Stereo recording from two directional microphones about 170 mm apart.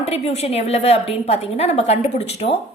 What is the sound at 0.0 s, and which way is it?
A woman's voice, 40° left (ahead or behind).